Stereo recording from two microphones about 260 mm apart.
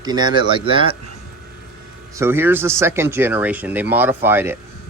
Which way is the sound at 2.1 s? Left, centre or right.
Centre.